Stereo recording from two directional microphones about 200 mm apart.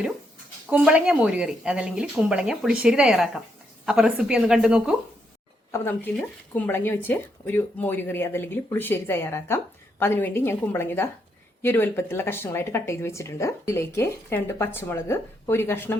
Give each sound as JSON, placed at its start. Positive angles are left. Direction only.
{"t": 0.7, "sound": "speech", "side_deg": -5}
{"t": 5.7, "sound": "speech", "side_deg": 10}